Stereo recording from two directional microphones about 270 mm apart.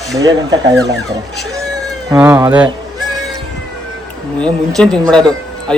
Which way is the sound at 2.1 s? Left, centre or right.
Centre.